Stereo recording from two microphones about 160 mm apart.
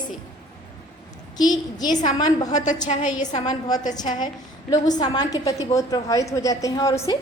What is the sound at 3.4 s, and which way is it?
A woman's voice, 25° left (ahead or behind).